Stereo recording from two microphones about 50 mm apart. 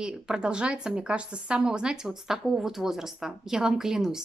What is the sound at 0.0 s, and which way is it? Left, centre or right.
A woman's voice, centre.